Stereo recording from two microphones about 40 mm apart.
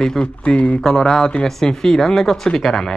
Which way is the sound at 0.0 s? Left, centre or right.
Centre.